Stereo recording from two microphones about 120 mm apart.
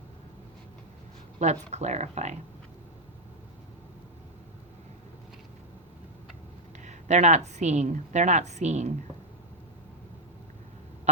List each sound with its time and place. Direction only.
1.4 s a woman's voice: 70° right (ahead or behind)
6.7 s a woman's voice: 75° right (ahead or behind)